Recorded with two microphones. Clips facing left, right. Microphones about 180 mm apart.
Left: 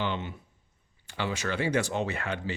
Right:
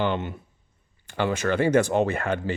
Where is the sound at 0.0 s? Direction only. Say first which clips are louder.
Right 6 dB; 55° right (ahead or behind).